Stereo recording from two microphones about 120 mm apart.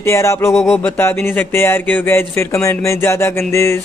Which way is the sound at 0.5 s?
Centre (ahead or behind).